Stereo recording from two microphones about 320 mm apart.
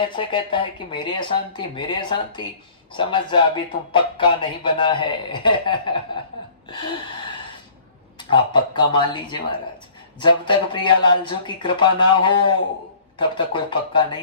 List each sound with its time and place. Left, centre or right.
0.0 s a man's voice: centre
8.2 s a man's voice: centre